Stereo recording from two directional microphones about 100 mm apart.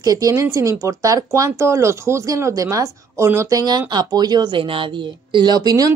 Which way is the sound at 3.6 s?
45° right (ahead or behind).